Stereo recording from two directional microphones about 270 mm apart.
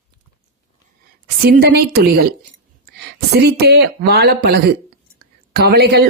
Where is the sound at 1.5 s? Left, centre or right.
Right.